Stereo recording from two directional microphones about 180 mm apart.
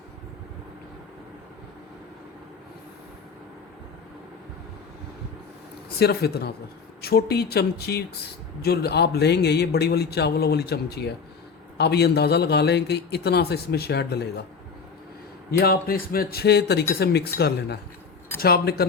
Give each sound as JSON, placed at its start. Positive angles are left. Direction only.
{"t": 6.0, "sound": "a man's voice", "side_deg": 60}
{"t": 15.5, "sound": "a man's voice", "side_deg": 55}